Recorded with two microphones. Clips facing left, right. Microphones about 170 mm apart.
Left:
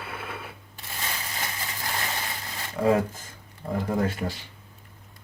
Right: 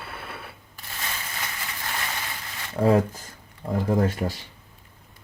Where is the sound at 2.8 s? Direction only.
30° right (ahead or behind).